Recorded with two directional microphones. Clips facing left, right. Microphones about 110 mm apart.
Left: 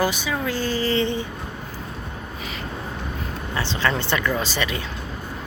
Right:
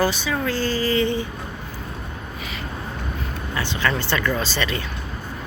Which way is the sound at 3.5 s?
30° left (ahead or behind).